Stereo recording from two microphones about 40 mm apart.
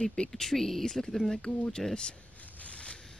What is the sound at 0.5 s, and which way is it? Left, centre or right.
Speech, centre.